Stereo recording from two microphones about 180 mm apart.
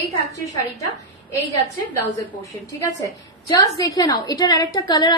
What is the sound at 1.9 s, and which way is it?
A woman's voice, 15° left (ahead or behind).